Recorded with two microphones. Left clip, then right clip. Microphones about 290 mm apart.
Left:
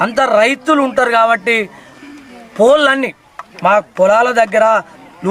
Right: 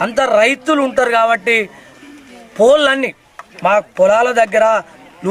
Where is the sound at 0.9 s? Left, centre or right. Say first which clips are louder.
Even; centre.